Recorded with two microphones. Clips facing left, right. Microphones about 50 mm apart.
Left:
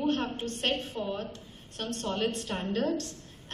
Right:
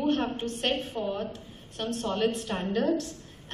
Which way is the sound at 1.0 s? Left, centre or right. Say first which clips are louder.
Right 3 dB; right.